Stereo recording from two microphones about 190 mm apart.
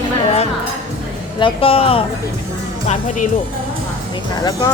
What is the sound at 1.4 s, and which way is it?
Speech, 25° left (ahead or behind).